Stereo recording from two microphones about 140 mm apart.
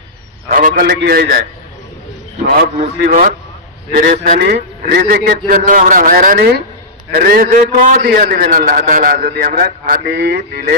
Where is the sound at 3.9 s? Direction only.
90° right.